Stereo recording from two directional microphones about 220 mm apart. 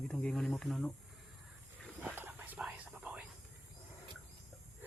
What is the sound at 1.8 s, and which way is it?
Whispering, 5° right (ahead or behind).